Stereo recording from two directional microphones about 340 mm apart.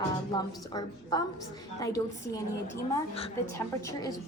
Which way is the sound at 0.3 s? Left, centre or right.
Centre.